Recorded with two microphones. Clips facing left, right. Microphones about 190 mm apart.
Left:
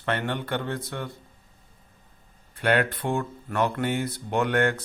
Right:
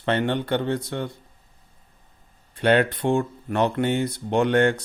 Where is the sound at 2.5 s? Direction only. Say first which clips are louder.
Right 4 dB; 20° right (ahead or behind).